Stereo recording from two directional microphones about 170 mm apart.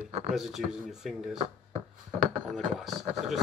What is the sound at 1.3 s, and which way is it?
Speech, 40° right (ahead or behind).